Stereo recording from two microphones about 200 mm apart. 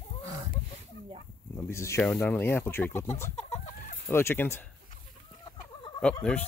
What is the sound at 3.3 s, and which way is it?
Chicken, 35° left (ahead or behind).